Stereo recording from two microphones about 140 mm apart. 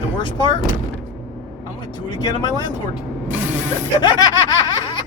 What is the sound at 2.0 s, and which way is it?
Speech, 30° left (ahead or behind).